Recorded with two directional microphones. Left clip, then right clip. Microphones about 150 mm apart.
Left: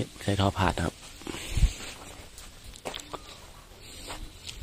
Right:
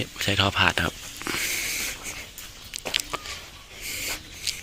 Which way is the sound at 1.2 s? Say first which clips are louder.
Right 11 dB; centre (ahead or behind).